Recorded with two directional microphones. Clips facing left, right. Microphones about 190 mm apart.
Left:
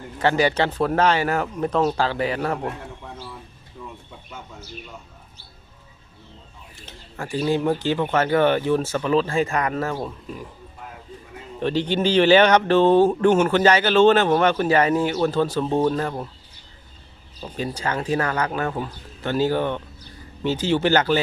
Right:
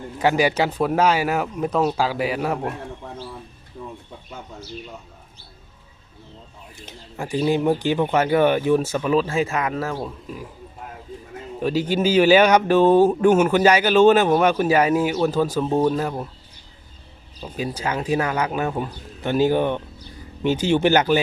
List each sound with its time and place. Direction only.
0.2 s speech: 10° right (ahead or behind)
3.8 s bird: 45° right (ahead or behind)
6.8 s speech: 15° right (ahead or behind)
11.6 s speech: 5° right (ahead or behind)
17.4 s speech: 10° right (ahead or behind)